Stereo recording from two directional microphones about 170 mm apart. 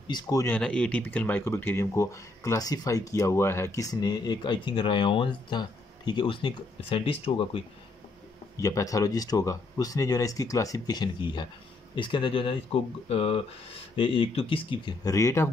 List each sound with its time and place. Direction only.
0.1 s speech: 20° left (ahead or behind)
0.6 s speech: 5° left (ahead or behind); by 7.6 s 35° left (ahead or behind)
8.5 s speech: 20° left (ahead or behind)
15.0 s speech: 20° left (ahead or behind)